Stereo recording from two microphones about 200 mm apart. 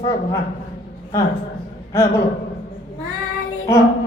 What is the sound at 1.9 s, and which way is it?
Speech, 15° left (ahead or behind).